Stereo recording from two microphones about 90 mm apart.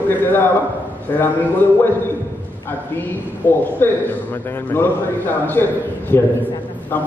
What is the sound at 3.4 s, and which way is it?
A man's voice, 25° left (ahead or behind).